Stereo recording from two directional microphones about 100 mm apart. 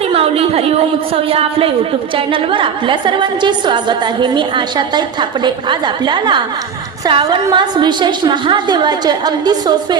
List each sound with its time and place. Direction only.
0.1 s a woman's voice: 75° right (ahead or behind)
2.1 s a woman's voice: 60° right (ahead or behind); by 10.0 s 45° right (ahead or behind)